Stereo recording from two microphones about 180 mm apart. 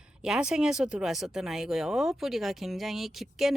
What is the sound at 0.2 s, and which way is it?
Speech, 5° right (ahead or behind).